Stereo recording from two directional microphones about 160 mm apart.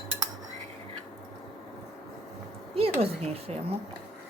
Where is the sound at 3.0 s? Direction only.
40° right (ahead or behind).